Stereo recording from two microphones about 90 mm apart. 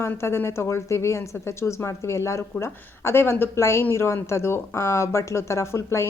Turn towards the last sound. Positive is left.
turn(degrees=30)  # may be behind; listen again after turning